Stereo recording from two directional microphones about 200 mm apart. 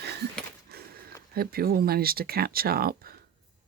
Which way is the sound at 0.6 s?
50° right (ahead or behind).